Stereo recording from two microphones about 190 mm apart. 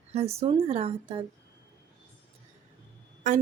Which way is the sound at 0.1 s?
35° right (ahead or behind).